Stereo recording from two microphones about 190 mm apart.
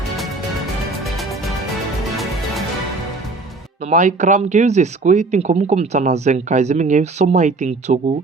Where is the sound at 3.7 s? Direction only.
40° right (ahead or behind).